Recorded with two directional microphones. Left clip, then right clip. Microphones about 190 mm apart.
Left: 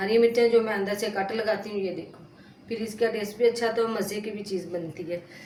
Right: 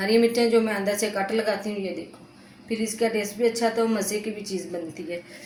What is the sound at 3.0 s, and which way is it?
A woman's voice, 25° right (ahead or behind).